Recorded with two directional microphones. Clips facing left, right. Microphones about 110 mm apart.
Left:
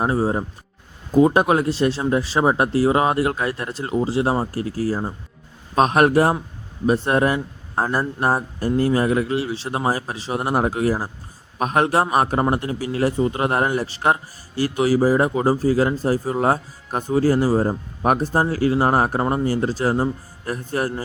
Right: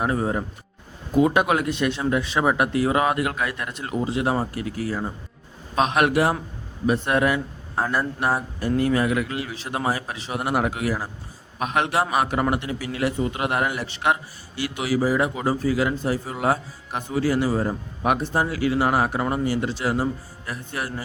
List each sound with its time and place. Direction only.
0.0 s a man's voice: 30° left (ahead or behind)